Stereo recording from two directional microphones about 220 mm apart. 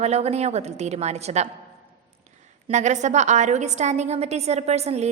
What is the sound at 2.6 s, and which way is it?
A woman's voice, 30° right (ahead or behind).